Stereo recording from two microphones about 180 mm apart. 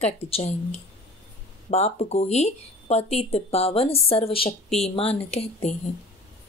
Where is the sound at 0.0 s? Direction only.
35° left (ahead or behind).